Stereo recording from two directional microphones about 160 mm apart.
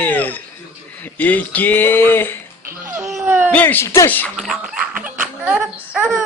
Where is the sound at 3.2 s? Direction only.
10° right (ahead or behind).